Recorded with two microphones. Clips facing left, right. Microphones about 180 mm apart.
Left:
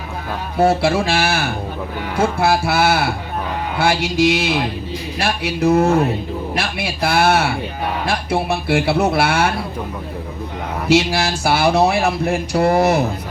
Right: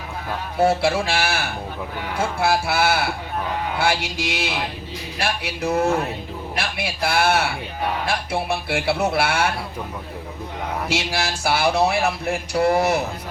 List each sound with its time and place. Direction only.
0.6 s speech: 40° left (ahead or behind)
6.6 s speech: 40° left (ahead or behind)
10.8 s speech: 40° left (ahead or behind)